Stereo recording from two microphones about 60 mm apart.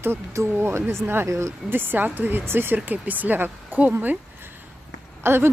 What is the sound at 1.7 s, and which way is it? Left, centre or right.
Speech, right.